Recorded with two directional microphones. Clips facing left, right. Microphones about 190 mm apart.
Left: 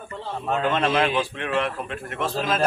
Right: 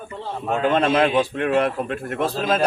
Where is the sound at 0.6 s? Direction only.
35° right (ahead or behind).